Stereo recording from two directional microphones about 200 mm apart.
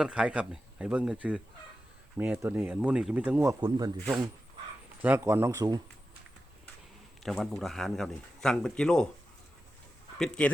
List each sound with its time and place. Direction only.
0.0 s speech: 5° right (ahead or behind)
3.6 s speech: 20° right (ahead or behind)
7.2 s speech: centre (ahead or behind)
10.2 s speech: 5° left (ahead or behind)